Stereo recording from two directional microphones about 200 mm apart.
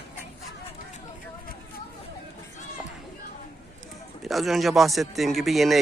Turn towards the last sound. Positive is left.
turn(degrees=0)  # may be behind; listen again after turning